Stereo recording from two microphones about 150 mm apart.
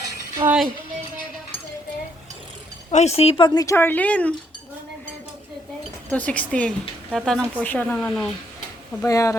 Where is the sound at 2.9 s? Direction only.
45° left (ahead or behind); by 3.8 s 25° left (ahead or behind).